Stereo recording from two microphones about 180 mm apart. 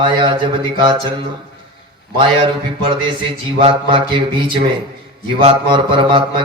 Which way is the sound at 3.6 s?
30° right (ahead or behind).